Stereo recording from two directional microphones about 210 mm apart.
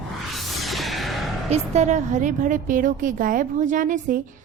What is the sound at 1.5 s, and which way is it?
A woman's voice, 35° right (ahead or behind).